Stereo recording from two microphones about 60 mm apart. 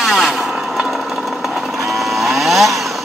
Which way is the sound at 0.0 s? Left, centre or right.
Centre.